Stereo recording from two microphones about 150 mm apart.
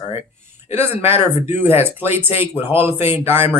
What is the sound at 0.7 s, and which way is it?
Speech, 15° right (ahead or behind).